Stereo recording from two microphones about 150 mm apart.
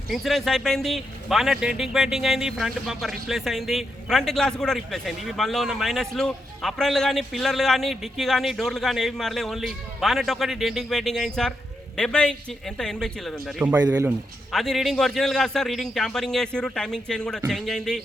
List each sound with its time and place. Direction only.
0.1 s a man's voice: centre (ahead or behind)
13.7 s speech: 20° right (ahead or behind)
14.5 s a man's voice: centre (ahead or behind)